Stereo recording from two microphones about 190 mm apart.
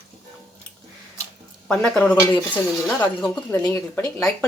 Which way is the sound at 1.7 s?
5° left (ahead or behind).